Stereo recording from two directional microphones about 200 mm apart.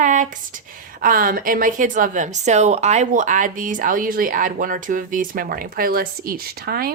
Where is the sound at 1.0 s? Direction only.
45° right (ahead or behind).